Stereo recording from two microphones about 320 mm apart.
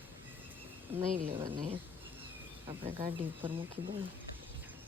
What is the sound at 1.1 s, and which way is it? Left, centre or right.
Speech, right.